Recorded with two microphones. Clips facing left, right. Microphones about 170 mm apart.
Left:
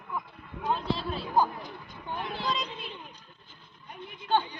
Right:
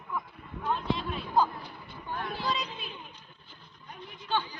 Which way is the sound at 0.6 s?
35° left (ahead or behind).